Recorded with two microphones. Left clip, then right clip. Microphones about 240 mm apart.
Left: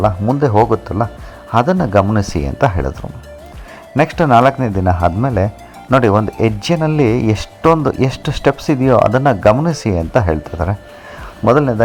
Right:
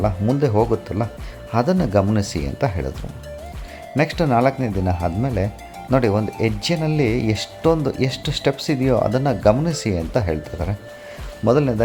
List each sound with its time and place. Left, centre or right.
0.3 s speech: centre
1.6 s a man's voice: centre
1.9 s speech: centre
3.9 s speech: centre